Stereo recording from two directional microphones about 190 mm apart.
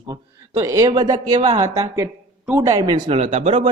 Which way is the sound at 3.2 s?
40° right (ahead or behind).